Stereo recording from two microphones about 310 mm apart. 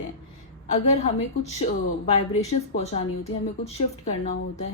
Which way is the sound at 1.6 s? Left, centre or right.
Left.